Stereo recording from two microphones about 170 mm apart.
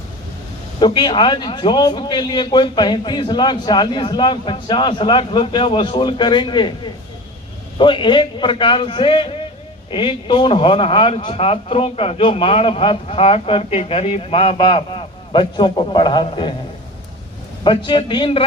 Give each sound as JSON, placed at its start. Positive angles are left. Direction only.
{"t": 0.8, "sound": "a man's voice", "side_deg": 25}
{"t": 17.6, "sound": "a man's voice", "side_deg": 30}